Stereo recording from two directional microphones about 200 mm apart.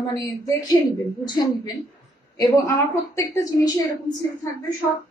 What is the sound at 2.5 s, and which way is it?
Speech, 15° left (ahead or behind).